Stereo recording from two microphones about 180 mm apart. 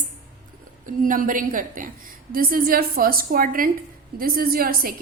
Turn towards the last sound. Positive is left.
turn(degrees=-55)  # may be behind; listen again after turning